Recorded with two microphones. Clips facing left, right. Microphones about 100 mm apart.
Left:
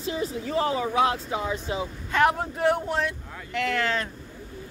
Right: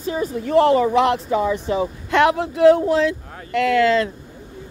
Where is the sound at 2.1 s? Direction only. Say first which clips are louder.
Right 5 dB; 85° right.